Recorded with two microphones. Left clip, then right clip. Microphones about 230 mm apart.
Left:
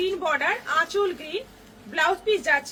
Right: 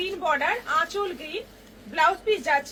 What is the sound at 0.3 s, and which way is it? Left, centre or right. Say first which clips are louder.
Speech: right 3 dB; centre.